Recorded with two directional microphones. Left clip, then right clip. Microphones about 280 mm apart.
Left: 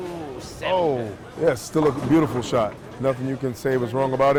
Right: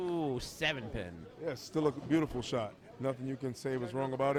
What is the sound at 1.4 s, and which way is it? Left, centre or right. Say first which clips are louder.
Speech: left 14 dB; centre.